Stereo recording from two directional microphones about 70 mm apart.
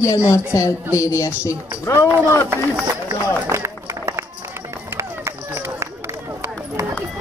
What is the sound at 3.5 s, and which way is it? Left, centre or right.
Run, right.